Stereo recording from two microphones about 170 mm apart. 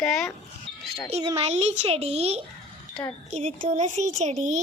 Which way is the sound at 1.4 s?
40° right (ahead or behind).